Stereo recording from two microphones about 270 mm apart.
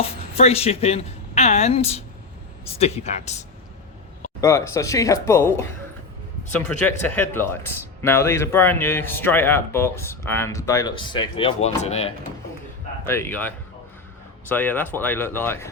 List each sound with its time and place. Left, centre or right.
0.0 s a woman's voice: left
4.4 s speech: centre
7.1 s speech: centre; by 12.1 s left
13.1 s speech: centre